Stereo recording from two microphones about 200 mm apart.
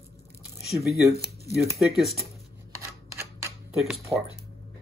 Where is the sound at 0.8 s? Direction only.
Centre (ahead or behind).